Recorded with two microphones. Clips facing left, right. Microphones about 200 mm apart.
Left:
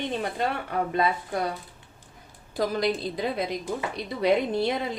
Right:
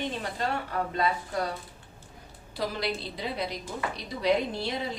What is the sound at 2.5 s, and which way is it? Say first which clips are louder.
A woman's voice: left 6 dB; 45° left (ahead or behind).